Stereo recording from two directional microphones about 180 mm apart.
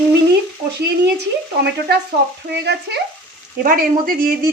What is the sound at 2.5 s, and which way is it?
Speech, 70° right (ahead or behind).